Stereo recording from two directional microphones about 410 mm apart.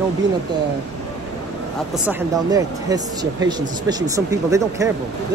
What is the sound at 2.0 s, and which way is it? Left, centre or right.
Speech, centre.